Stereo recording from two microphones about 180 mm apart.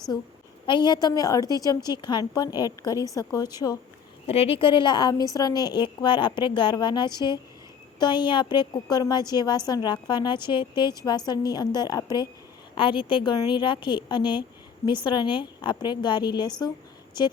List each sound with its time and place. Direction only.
0.6 s a woman's voice: 25° left (ahead or behind)
4.3 s a woman's voice: 35° left (ahead or behind)